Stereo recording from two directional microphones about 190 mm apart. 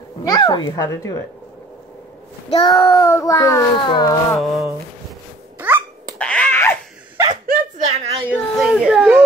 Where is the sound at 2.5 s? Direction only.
30° left (ahead or behind).